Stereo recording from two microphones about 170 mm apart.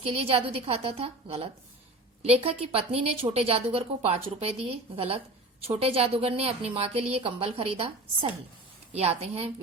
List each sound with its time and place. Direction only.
0.0 s a woman's voice: 35° right (ahead or behind)